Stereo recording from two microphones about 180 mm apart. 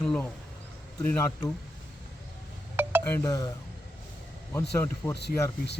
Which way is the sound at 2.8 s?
10° right (ahead or behind).